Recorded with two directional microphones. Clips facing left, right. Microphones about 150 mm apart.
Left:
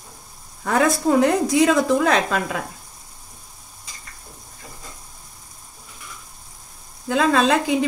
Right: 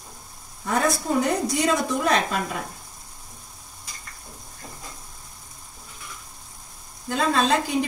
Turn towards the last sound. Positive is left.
turn(degrees=90)